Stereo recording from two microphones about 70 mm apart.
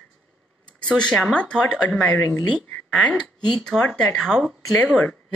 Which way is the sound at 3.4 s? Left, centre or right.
Centre.